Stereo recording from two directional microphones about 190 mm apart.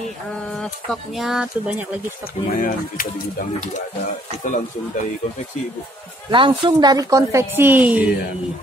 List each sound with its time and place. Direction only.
1.1 s speech: centre (ahead or behind)
2.5 s speech: 45° left (ahead or behind)
6.3 s a woman's voice: 25° right (ahead or behind); by 8.1 s 10° right (ahead or behind)